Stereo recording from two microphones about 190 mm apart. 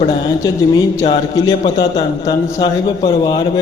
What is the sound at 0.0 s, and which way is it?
A man's voice, 20° left (ahead or behind).